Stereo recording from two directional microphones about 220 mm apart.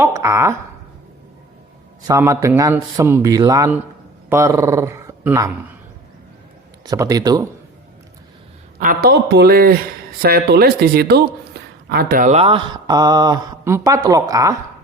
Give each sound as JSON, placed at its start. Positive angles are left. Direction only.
{"t": 0.0, "sound": "a man's voice", "side_deg": -10}
{"t": 2.0, "sound": "a man's voice", "side_deg": -15}
{"t": 6.8, "sound": "a man's voice", "side_deg": -15}
{"t": 8.8, "sound": "speech", "side_deg": -40}